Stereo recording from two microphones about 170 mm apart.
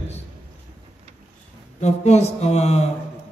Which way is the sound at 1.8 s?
40° left (ahead or behind).